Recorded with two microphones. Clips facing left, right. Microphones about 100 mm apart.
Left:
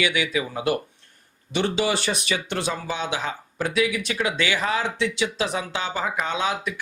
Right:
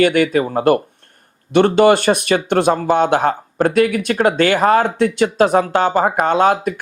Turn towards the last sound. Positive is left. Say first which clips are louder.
# right 11 dB
turn(degrees=-50)  # may be behind; listen again after turning